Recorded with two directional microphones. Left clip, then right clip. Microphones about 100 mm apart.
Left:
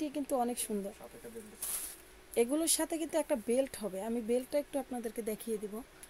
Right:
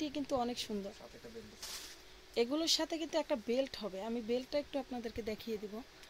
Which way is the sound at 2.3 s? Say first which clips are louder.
Left 3 dB; 20° left (ahead or behind).